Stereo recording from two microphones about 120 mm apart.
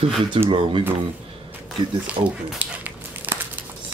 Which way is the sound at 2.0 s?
15° right (ahead or behind).